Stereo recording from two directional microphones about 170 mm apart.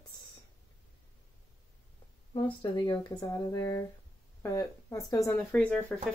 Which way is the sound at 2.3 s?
25° left (ahead or behind).